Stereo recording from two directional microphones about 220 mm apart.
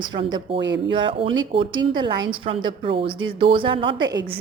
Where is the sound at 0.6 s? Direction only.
55° right (ahead or behind).